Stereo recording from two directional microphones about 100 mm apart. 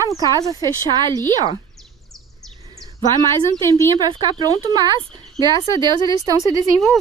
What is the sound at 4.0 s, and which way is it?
Speech, 40° right (ahead or behind).